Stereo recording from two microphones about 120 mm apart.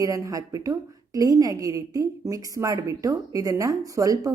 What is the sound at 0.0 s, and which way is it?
A woman's voice, 30° right (ahead or behind).